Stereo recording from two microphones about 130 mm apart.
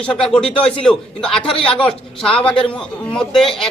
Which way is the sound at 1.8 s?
5° left (ahead or behind).